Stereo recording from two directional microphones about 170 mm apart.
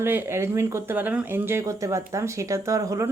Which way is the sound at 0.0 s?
15° right (ahead or behind).